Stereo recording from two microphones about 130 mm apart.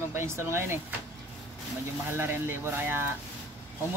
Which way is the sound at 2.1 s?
20° right (ahead or behind).